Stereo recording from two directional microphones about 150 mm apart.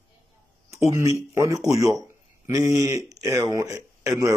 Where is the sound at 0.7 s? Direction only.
20° right (ahead or behind).